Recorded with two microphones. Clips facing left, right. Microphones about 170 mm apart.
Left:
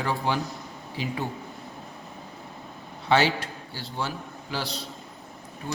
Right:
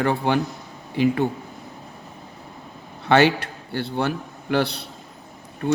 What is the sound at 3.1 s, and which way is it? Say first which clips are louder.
A man's voice: right 5 dB; 65° right (ahead or behind).